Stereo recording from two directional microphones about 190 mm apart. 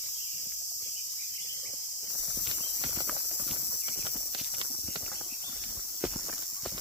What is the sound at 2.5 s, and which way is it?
Clip-clop, 25° right (ahead or behind).